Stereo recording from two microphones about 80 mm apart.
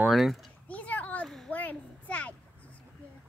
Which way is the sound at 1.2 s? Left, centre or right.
Centre.